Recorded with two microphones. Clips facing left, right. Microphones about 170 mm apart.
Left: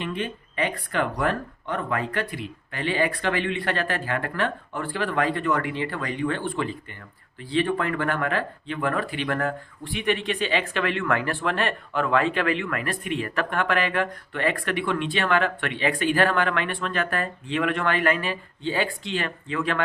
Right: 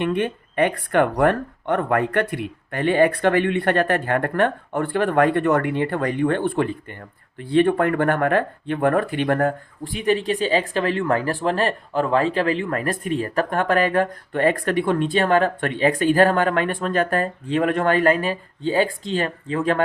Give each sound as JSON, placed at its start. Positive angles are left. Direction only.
{"t": 0.0, "sound": "speech", "side_deg": -60}